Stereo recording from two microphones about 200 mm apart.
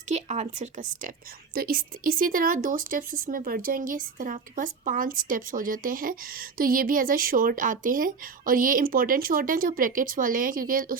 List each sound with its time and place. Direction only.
0.1 s a woman's voice: 35° right (ahead or behind)